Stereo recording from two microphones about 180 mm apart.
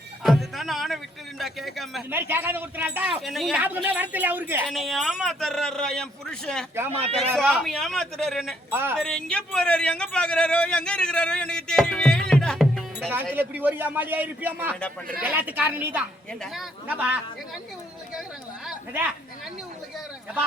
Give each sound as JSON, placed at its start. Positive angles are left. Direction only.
{"t": 0.2, "sound": "a sound", "side_deg": 0}
{"t": 1.4, "sound": "speech", "side_deg": 0}
{"t": 2.0, "sound": "speech", "side_deg": -10}
{"t": 4.6, "sound": "speech", "side_deg": 0}
{"t": 8.7, "sound": "speech", "side_deg": -10}
{"t": 9.0, "sound": "speech", "side_deg": 5}
{"t": 13.3, "sound": "speech", "side_deg": -10}